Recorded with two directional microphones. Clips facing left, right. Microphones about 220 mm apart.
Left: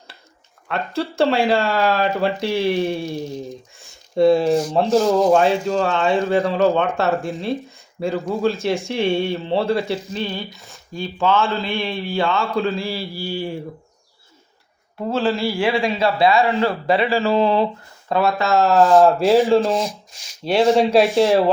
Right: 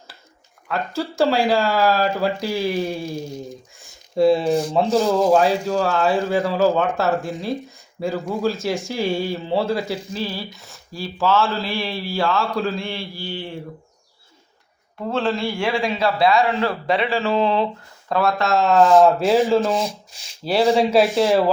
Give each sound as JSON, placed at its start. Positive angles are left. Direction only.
{"t": 0.7, "sound": "speech", "side_deg": 0}
{"t": 3.8, "sound": "a sound", "side_deg": 0}
{"t": 4.9, "sound": "speech", "side_deg": 0}
{"t": 15.1, "sound": "speech", "side_deg": 0}